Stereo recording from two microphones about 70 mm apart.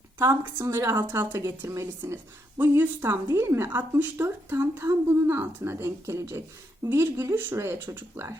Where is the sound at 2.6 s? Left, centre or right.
Right.